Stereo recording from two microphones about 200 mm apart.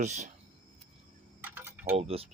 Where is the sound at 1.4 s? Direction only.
10° right (ahead or behind).